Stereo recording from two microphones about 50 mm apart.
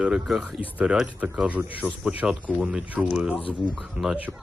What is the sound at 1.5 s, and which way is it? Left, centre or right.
Speech, right.